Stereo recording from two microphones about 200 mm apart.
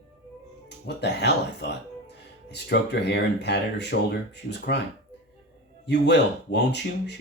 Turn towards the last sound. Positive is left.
turn(degrees=60)  # may be behind; listen again after turning